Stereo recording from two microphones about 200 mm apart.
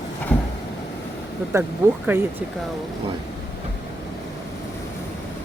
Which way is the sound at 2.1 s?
10° right (ahead or behind).